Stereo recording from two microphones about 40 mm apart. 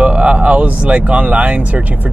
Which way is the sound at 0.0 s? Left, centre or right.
Right.